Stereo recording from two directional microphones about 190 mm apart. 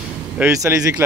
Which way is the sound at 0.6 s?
10° right (ahead or behind).